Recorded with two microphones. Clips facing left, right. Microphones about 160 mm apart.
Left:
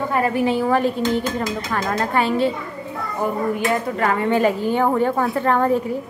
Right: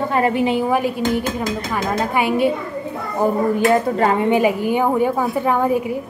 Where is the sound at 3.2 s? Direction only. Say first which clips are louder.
Right 5 dB; 35° right (ahead or behind); by 6.0 s 10° right (ahead or behind).